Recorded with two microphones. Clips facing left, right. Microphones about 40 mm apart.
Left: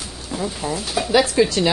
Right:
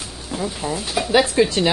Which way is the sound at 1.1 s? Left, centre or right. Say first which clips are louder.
Even; right.